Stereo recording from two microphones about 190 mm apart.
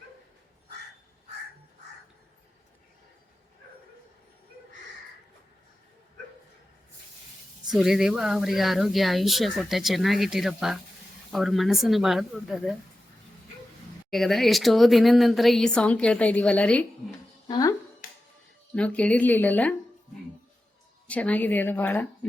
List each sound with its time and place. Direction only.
7.7 s speech: centre (ahead or behind)
14.1 s speech: centre (ahead or behind)
17.5 s speech: 20° left (ahead or behind)
18.7 s speech: 5° left (ahead or behind)
21.1 s speech: 5° left (ahead or behind)